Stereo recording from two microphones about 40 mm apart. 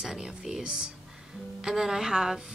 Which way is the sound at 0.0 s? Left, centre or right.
Centre.